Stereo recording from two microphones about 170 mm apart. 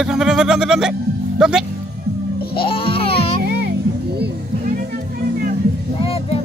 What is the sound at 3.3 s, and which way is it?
Music, 75° right (ahead or behind).